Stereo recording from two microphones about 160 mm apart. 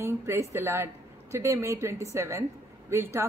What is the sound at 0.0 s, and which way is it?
A woman's voice, 15° right (ahead or behind).